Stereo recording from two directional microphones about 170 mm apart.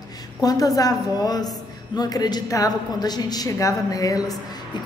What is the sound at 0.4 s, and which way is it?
A woman's voice, 20° left (ahead or behind).